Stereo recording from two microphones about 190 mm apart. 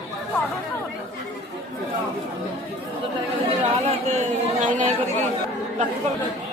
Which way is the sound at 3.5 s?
35° right (ahead or behind).